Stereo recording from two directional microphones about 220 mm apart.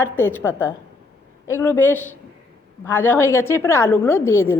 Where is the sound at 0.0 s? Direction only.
10° left (ahead or behind).